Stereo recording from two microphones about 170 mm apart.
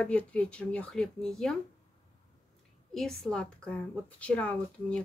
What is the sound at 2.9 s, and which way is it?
Speech, centre (ahead or behind).